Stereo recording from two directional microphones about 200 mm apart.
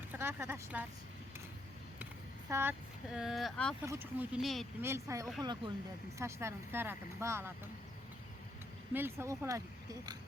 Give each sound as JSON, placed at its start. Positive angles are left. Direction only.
{"t": 0.1, "sound": "speech", "side_deg": -10}
{"t": 2.5, "sound": "speech", "side_deg": -10}
{"t": 3.8, "sound": "speech", "side_deg": -10}
{"t": 4.8, "sound": "speech", "side_deg": -15}
{"t": 8.9, "sound": "speech", "side_deg": -10}